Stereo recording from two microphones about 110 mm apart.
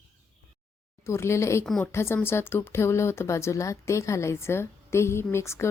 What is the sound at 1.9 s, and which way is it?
A woman's voice, 25° left (ahead or behind).